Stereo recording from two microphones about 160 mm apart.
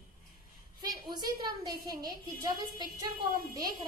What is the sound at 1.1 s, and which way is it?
A woman's voice, 25° right (ahead or behind).